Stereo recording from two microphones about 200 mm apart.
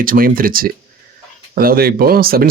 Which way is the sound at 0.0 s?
45° right (ahead or behind).